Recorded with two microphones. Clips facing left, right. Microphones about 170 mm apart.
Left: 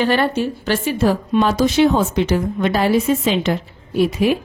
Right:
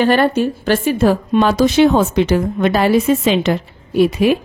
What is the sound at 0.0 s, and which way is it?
A woman's voice, 55° right (ahead or behind).